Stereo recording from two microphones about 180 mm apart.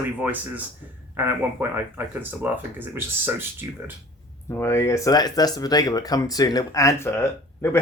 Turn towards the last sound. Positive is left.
turn(degrees=15)  # may be behind; listen again after turning